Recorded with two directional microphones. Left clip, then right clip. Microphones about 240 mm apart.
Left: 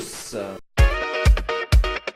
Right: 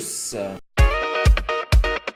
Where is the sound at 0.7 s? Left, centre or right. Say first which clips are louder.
Right 2 dB; centre.